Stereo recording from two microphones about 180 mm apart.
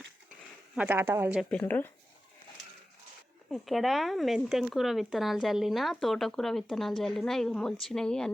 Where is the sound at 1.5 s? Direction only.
10° left (ahead or behind).